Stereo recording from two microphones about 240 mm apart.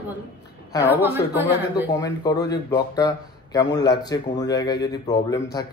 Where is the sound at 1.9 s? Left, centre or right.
Centre.